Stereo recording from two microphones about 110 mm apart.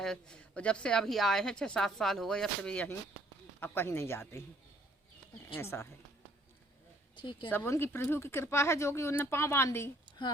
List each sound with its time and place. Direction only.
0.0 s speech: 5° left (ahead or behind)
3.6 s speech: 20° left (ahead or behind)
5.5 s speech: 25° left (ahead or behind)
7.2 s a woman's voice: 50° left (ahead or behind)
7.5 s speech: 20° left (ahead or behind)